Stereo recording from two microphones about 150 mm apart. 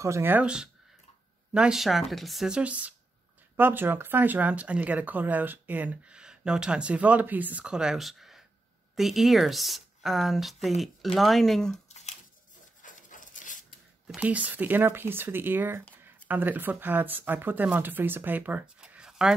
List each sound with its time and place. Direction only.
0.0 s speech: 15° right (ahead or behind); by 11.7 s centre (ahead or behind)
11.7 s a sound: 50° left (ahead or behind)
12.8 s rub: 60° left (ahead or behind)
14.0 s speech: 10° right (ahead or behind)